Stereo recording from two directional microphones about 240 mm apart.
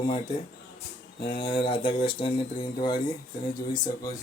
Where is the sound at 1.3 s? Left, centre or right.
Left.